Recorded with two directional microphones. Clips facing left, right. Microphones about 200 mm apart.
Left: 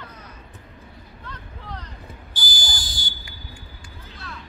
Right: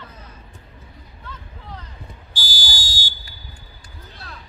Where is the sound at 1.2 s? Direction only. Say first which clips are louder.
Even; 5° right (ahead or behind).